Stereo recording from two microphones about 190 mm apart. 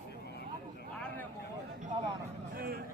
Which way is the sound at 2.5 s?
50° right (ahead or behind).